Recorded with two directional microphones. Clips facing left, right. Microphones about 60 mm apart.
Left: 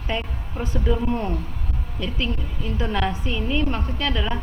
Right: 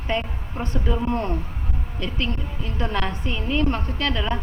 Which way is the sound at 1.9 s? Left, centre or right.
Centre.